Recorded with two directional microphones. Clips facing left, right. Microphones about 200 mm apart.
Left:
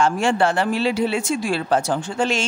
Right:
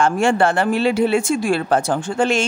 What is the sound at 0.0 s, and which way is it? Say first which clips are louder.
Speech: right 2 dB; 50° right (ahead or behind).